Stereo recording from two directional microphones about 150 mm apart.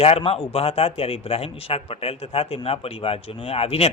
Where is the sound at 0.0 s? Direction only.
40° left (ahead or behind).